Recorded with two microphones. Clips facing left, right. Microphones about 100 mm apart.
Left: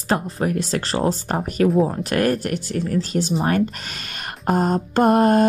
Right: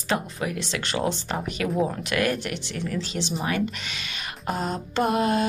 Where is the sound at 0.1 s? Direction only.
40° left (ahead or behind).